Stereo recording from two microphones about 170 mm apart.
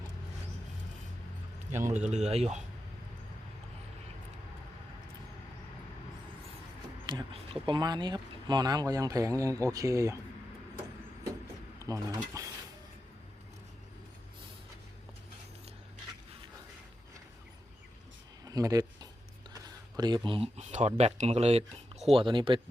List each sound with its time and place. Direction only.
1.9 s speech: 45° right (ahead or behind)
7.1 s speech: 30° right (ahead or behind)
11.8 s speech: 20° right (ahead or behind)
18.4 s a sound: 20° right (ahead or behind)
20.0 s speech: 25° right (ahead or behind)